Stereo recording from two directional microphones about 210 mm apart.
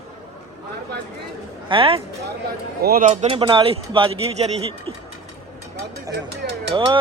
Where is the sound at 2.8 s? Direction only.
45° right (ahead or behind).